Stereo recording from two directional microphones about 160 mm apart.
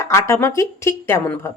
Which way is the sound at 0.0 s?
20° left (ahead or behind).